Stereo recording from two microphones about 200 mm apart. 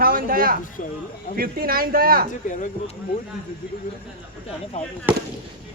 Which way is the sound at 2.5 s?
40° left (ahead or behind).